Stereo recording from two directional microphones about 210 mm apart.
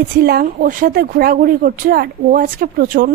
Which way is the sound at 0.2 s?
45° right (ahead or behind).